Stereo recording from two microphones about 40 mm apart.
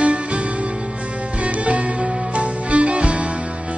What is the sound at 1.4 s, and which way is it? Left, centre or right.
Music, right.